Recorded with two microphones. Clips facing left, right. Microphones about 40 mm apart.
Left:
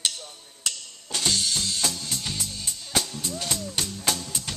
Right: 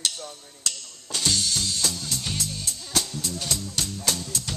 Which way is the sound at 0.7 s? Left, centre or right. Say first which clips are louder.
Even; centre.